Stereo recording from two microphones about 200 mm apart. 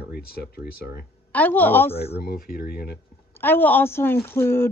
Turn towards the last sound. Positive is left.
turn(degrees=10)  # may be behind; listen again after turning